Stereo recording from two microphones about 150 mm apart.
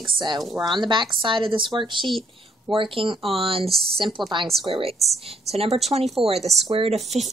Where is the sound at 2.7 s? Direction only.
35° right (ahead or behind).